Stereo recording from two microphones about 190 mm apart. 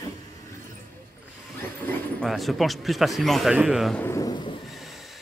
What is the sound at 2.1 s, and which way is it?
Speech, centre (ahead or behind).